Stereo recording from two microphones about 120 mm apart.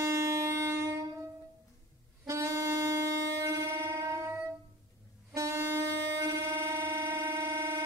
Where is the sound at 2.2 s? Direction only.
25° right (ahead or behind).